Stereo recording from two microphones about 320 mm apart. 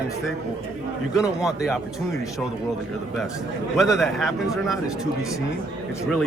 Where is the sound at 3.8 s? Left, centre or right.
Centre.